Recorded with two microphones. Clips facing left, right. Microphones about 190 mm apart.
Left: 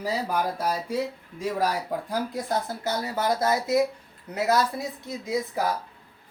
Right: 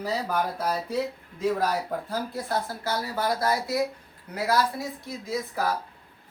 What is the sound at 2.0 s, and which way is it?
Speech, 15° left (ahead or behind).